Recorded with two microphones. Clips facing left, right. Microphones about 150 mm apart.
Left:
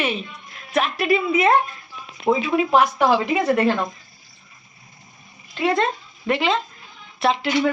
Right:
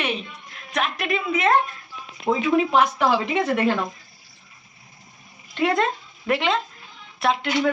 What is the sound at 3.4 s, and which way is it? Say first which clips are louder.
Speech: left 2 dB; centre (ahead or behind).